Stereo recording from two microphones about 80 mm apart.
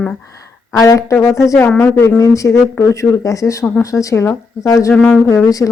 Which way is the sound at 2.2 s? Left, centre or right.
Left.